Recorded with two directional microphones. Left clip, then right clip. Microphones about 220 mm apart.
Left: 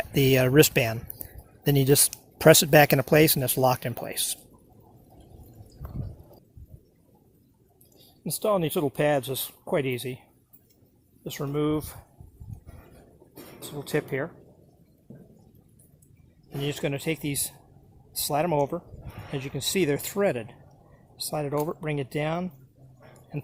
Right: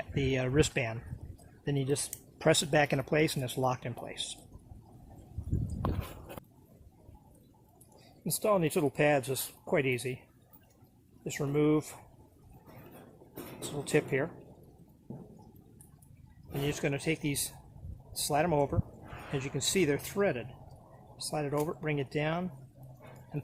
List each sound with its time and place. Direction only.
0.1 s speech: 40° left (ahead or behind)
8.2 s speech: 30° left (ahead or behind)
11.2 s speech: 25° left (ahead or behind)
13.6 s speech: 20° left (ahead or behind)
16.6 s speech: 35° left (ahead or behind)